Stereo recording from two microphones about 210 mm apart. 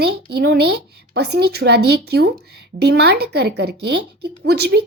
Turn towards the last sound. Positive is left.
turn(degrees=-50)  # may be behind; listen again after turning